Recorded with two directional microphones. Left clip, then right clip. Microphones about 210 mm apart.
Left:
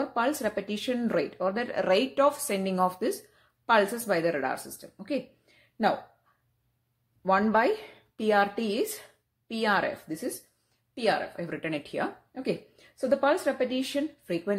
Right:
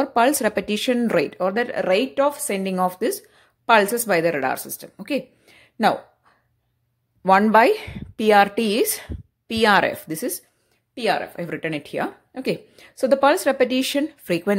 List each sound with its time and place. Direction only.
0.0 s speech: 35° right (ahead or behind)
7.2 s speech: 35° right (ahead or behind)